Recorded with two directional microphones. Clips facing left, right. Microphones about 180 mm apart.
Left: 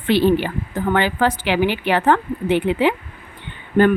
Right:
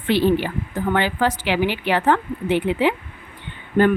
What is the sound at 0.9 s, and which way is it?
A woman's voice, 55° left (ahead or behind).